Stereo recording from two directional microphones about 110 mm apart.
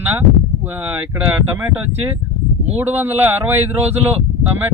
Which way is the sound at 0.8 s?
20° right (ahead or behind).